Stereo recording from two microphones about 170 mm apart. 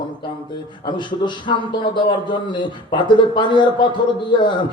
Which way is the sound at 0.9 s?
25° left (ahead or behind).